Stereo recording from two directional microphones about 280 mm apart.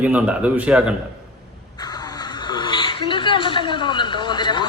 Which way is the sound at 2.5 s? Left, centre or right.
Centre.